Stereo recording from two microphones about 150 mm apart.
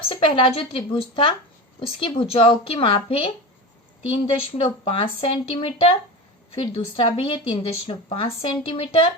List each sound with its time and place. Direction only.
0.1 s a woman's voice: 35° left (ahead or behind)